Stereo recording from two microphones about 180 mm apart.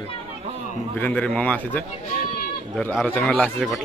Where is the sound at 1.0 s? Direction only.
10° left (ahead or behind).